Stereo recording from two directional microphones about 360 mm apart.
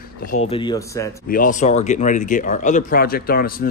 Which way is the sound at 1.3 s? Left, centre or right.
Left.